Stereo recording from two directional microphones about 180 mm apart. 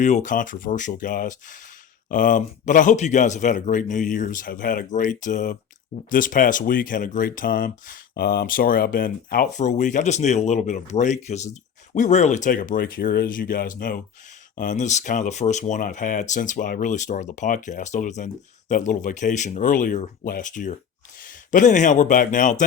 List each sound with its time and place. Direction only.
0.0 s speech: 40° left (ahead or behind)